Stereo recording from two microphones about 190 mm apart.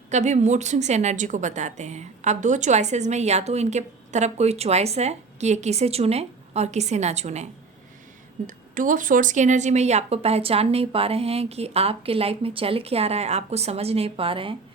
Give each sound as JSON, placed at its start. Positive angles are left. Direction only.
{"t": 0.1, "sound": "a woman's voice", "side_deg": -40}